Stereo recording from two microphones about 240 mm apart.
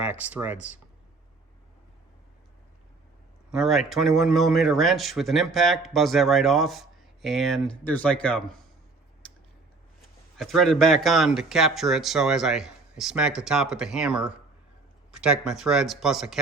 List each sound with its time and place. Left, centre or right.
0.0 s speech: centre
3.5 s speech: centre
10.3 s speech: centre